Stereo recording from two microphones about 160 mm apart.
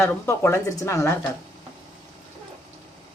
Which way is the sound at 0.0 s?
15° left (ahead or behind).